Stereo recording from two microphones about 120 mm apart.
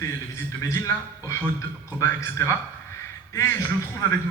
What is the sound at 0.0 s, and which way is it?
A man's voice, 25° left (ahead or behind).